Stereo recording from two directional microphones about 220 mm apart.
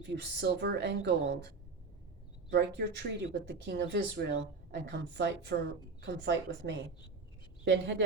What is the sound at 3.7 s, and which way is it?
A woman's voice, 50° right (ahead or behind).